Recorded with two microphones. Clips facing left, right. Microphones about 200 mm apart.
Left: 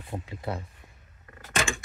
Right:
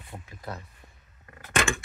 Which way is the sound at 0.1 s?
25° left (ahead or behind).